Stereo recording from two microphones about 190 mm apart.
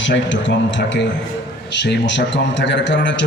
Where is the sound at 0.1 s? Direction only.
70° left (ahead or behind).